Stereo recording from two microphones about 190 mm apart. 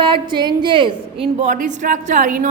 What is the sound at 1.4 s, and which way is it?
A woman's voice, 40° right (ahead or behind).